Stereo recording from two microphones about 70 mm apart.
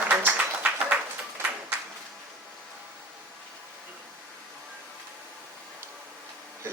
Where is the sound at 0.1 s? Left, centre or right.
Right.